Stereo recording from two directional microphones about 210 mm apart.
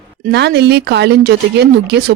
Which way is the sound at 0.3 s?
50° right (ahead or behind).